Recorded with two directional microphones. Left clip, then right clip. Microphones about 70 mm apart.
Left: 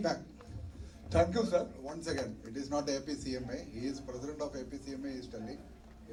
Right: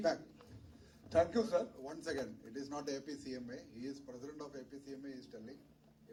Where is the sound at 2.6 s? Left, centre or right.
Right.